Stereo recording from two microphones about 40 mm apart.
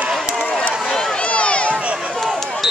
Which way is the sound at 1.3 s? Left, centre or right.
Left.